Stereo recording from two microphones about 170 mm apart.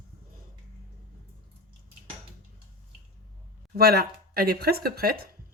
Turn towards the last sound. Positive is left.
turn(degrees=-60)  # may be behind; listen again after turning